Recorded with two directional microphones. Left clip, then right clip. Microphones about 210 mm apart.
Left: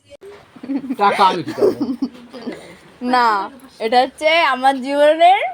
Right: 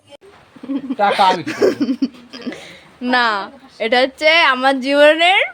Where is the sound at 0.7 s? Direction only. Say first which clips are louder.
Even; 15° right (ahead or behind).